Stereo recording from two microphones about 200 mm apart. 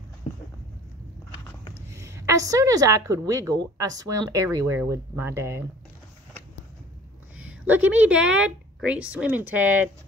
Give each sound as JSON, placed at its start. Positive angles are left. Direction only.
{"t": 1.9, "sound": "a woman's voice", "side_deg": -15}
{"t": 7.4, "sound": "a woman's voice", "side_deg": -10}